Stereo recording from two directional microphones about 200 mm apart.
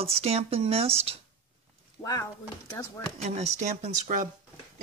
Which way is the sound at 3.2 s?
35° right (ahead or behind).